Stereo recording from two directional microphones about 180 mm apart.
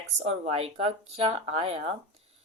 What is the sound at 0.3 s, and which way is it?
Speech, 35° right (ahead or behind).